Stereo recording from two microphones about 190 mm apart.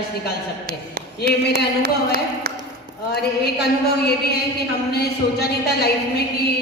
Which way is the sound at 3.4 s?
60° left (ahead or behind).